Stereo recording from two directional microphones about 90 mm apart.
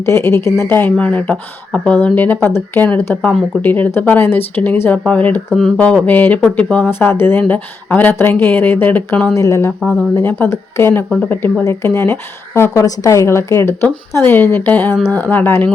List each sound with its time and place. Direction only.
0.0 s a woman's voice: 30° left (ahead or behind)
5.5 s speech: 5° left (ahead or behind)
5.8 s speech: 20° left (ahead or behind)
7.0 s a woman's voice: 25° left (ahead or behind)
9.3 s a woman's voice: 35° left (ahead or behind)
9.8 s speech: 10° left (ahead or behind)
10.2 s a woman's voice: 20° left (ahead or behind)
11.6 s a woman's voice: 30° left (ahead or behind)